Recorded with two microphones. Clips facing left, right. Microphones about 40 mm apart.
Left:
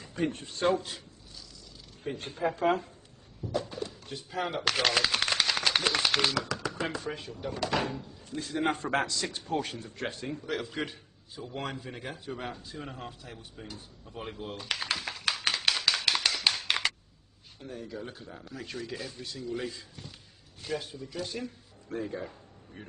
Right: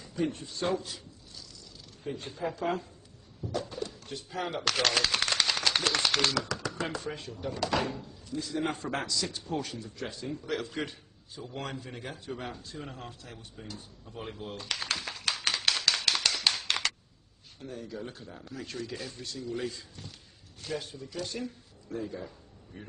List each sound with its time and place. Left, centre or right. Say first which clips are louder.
0.0 s a man's voice: even; left
2.0 s speech: left 3 dB; left
3.5 s speech: left 1 dB; centre
8.3 s a man's voice: left 2 dB; left
10.4 s a man's voice: even; centre
16.6 s a sound: left 2 dB; centre
17.6 s speech: even; centre
21.8 s a man's voice: left 2 dB; left
22.8 s speech: even; left